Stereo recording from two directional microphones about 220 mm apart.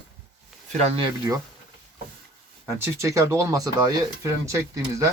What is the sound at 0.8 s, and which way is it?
Speech, 30° right (ahead or behind).